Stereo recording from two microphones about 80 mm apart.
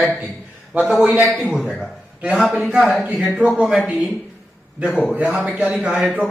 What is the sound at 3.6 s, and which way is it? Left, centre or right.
Speech, centre.